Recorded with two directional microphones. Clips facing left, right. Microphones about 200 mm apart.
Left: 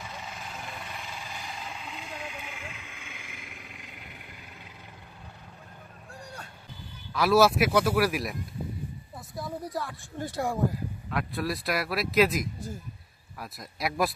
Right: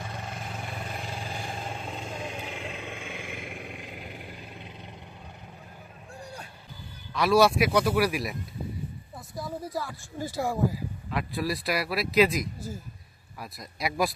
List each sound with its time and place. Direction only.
0.0 s vehicle: 50° right (ahead or behind); by 4.6 s 25° right (ahead or behind)
7.2 s speech: centre (ahead or behind)